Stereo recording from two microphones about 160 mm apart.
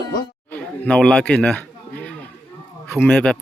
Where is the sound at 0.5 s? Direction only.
5° left (ahead or behind).